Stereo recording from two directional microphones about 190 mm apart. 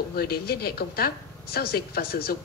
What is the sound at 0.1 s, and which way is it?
A woman's voice, 55° left (ahead or behind).